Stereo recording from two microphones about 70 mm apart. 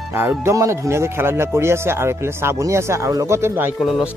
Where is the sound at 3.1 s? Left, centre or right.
Right.